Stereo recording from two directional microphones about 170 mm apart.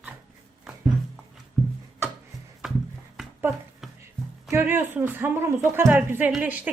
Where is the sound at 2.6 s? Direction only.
5° right (ahead or behind).